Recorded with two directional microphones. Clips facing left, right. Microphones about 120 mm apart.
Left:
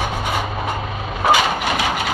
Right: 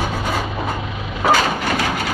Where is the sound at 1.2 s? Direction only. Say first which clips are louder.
Even; 20° left (ahead or behind).